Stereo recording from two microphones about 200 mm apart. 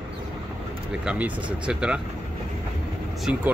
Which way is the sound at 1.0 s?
5° right (ahead or behind).